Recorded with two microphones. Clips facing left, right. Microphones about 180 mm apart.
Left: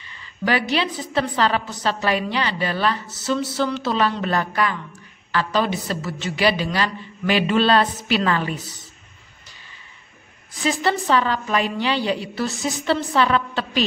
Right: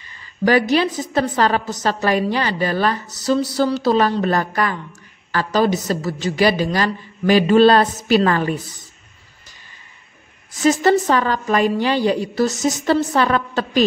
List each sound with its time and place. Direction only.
0.0 s a woman's voice: 40° right (ahead or behind)
10.5 s a woman's voice: 45° right (ahead or behind)